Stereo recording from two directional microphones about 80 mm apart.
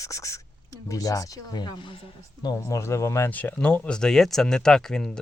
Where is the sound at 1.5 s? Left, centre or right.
Left.